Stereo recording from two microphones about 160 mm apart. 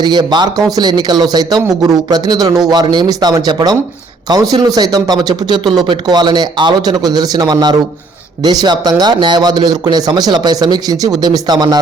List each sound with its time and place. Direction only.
0.0 s speech: 25° right (ahead or behind)